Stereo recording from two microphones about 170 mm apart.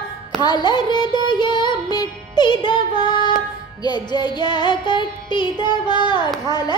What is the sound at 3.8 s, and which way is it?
Child singing, 25° left (ahead or behind).